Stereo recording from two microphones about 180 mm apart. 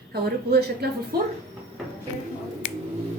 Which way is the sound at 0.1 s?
60° right (ahead or behind).